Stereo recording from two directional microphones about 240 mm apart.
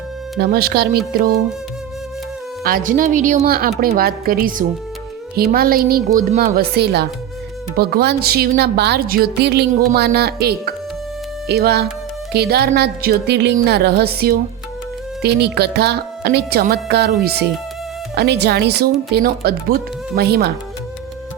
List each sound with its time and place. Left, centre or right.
0.3 s a woman's voice: right
2.6 s a woman's voice: right